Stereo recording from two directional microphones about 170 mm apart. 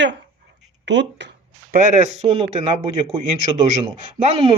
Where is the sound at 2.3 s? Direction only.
35° right (ahead or behind).